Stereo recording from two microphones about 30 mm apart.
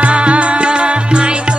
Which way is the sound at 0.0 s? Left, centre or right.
Right.